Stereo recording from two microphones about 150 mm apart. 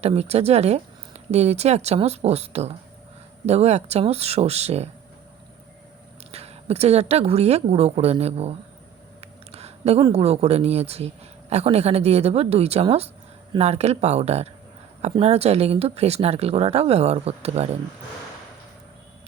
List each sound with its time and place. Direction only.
0.0 s speech: 45° right (ahead or behind)
6.3 s speech: 45° right (ahead or behind)